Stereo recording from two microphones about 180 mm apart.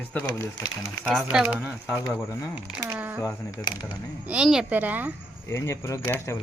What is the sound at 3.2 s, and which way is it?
Speech, 15° left (ahead or behind).